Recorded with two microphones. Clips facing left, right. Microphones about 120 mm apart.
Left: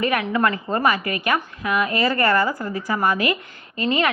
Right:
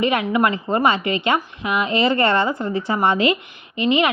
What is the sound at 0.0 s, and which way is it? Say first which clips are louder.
A woman's voice: right 2 dB; 20° right (ahead or behind).